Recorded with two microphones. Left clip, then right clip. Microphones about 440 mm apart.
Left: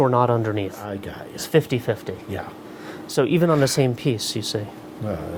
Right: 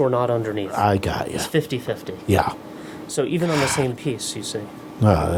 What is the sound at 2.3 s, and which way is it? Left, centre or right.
Speech, right.